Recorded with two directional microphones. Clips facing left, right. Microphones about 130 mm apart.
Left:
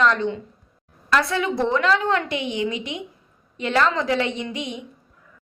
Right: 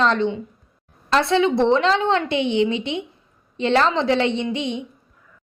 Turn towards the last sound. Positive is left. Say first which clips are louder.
# right 5 dB
turn(degrees=-25)  # may be behind; listen again after turning